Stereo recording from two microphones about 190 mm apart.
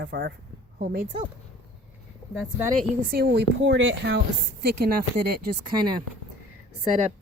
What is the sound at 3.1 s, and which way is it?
A woman's voice, 60° right (ahead or behind).